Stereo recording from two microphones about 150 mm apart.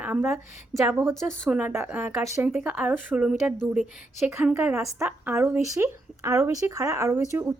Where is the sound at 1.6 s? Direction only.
10° right (ahead or behind).